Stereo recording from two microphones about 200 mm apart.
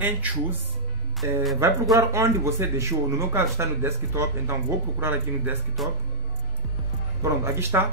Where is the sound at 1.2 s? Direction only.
15° right (ahead or behind).